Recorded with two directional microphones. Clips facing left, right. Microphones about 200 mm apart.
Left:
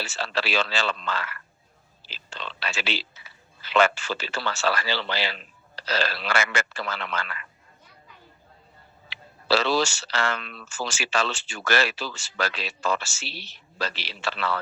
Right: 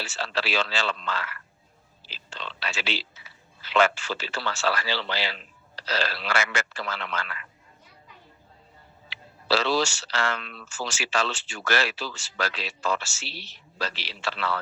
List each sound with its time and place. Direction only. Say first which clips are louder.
0.0 s a man's voice: left 1 dB; 55° left (ahead or behind)
9.0 s a man's voice: left 2 dB; 55° left (ahead or behind)